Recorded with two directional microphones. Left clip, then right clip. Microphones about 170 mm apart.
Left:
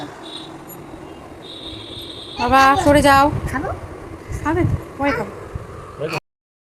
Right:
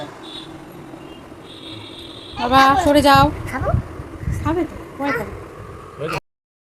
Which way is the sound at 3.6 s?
30° right (ahead or behind).